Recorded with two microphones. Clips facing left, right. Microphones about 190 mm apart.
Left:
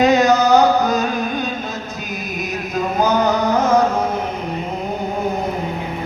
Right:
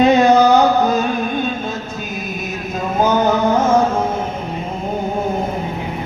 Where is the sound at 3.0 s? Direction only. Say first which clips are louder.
Right 2 dB; 25° right (ahead or behind).